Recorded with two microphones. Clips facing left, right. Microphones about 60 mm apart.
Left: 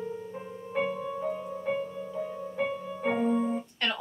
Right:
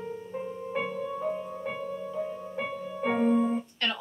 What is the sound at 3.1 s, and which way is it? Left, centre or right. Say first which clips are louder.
Keyboard: right 2 dB; centre.